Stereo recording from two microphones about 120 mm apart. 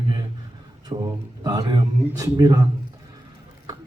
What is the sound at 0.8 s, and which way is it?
Speech, 35° right (ahead or behind).